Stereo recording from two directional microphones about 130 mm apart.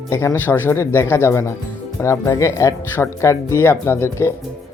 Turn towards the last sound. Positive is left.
turn(degrees=20)  # may be behind; listen again after turning